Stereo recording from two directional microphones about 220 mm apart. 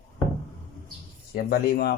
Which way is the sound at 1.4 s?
45° left (ahead or behind).